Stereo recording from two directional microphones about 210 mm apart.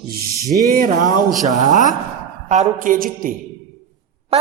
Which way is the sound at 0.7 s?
40° right (ahead or behind).